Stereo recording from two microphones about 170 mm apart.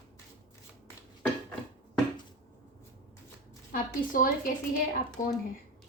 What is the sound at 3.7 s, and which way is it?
A woman's voice, 55° left (ahead or behind).